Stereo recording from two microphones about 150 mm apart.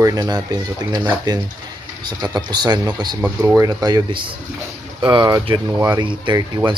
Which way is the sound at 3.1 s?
10° right (ahead or behind).